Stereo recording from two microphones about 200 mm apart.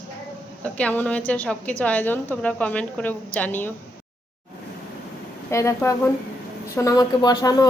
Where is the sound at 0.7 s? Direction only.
5° left (ahead or behind).